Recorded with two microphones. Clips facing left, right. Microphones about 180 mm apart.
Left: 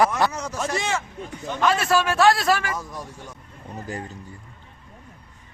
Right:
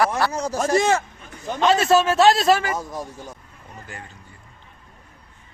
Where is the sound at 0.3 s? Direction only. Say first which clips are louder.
Right 5 dB; 30° right (ahead or behind).